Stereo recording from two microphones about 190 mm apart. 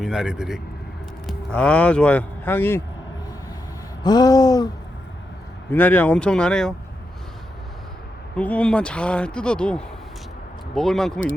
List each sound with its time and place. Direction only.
0.0 s speech: centre (ahead or behind)
4.0 s a sound: 20° left (ahead or behind)
5.7 s speech: 10° left (ahead or behind)
8.4 s speech: 5° left (ahead or behind)